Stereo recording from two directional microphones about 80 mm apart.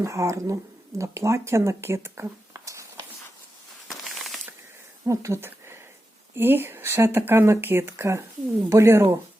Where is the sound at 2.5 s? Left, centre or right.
Right.